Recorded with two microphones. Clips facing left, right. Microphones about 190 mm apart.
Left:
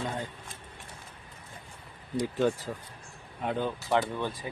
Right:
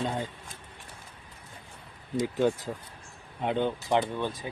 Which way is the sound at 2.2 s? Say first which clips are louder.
Right 1 dB; 20° right (ahead or behind).